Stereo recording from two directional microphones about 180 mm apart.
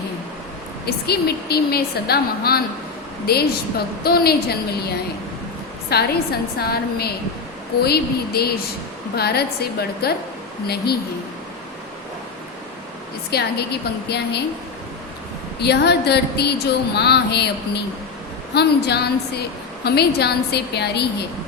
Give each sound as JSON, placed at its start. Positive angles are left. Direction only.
{"t": 0.9, "sound": "a woman's voice", "side_deg": 60}
{"t": 4.0, "sound": "a woman's voice", "side_deg": 60}
{"t": 5.9, "sound": "a woman's voice", "side_deg": 60}
{"t": 13.3, "sound": "a woman's voice", "side_deg": 65}
{"t": 15.6, "sound": "a woman's voice", "side_deg": 65}